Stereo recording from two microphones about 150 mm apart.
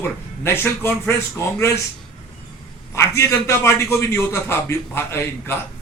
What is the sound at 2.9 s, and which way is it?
A man's voice, 20° left (ahead or behind).